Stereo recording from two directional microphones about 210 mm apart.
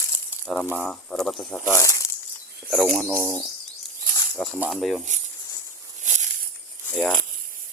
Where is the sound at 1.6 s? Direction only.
15° left (ahead or behind).